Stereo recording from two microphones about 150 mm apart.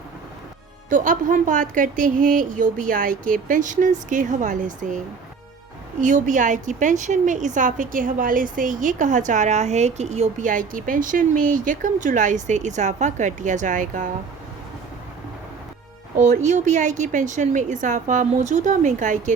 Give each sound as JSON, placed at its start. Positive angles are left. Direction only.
{"t": 0.9, "sound": "a woman's voice", "side_deg": -60}
{"t": 6.0, "sound": "a woman's voice", "side_deg": -55}
{"t": 16.2, "sound": "a woman's voice", "side_deg": -50}